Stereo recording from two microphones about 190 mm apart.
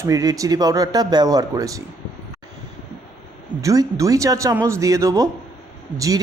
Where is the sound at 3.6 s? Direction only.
15° right (ahead or behind).